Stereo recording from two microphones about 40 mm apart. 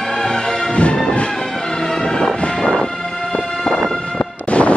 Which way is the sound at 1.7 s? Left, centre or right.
Centre.